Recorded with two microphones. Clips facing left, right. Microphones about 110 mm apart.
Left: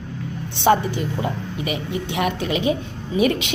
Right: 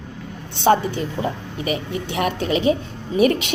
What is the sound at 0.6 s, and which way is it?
A woman's voice, 30° right (ahead or behind).